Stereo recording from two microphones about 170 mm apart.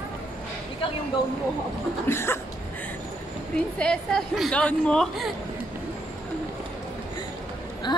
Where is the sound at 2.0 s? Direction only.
15° left (ahead or behind).